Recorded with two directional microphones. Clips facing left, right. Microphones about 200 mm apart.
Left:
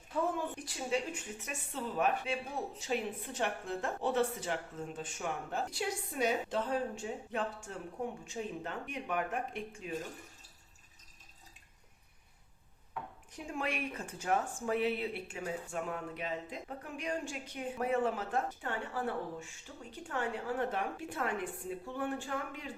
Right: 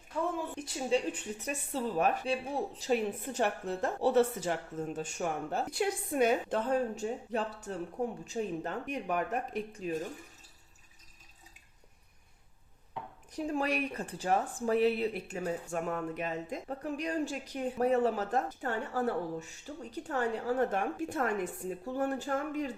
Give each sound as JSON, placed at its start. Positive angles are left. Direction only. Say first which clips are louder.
{"t": 0.3, "sound": "a sound", "louder": "right 1 dB", "side_deg": 0}
{"t": 0.5, "sound": "a woman's voice", "louder": "right 5 dB", "side_deg": -25}
{"t": 5.7, "sound": "a woman's voice", "louder": "right 6 dB", "side_deg": -55}
{"t": 13.3, "sound": "speech", "louder": "right 6 dB", "side_deg": -40}